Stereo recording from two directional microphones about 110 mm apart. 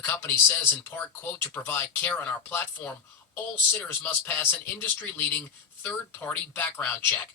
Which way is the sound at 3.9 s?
20° left (ahead or behind).